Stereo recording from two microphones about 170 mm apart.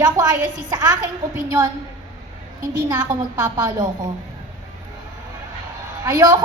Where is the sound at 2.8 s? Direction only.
25° right (ahead or behind).